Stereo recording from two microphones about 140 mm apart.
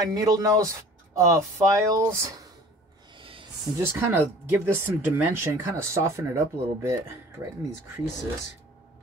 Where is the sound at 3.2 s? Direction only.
40° right (ahead or behind).